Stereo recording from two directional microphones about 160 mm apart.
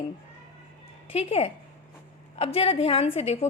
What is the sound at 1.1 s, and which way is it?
A woman's voice, 40° left (ahead or behind).